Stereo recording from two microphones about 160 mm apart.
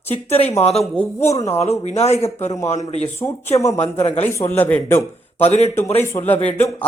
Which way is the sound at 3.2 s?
15° left (ahead or behind).